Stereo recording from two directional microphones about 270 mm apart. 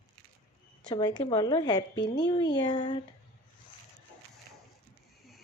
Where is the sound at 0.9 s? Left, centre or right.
Centre.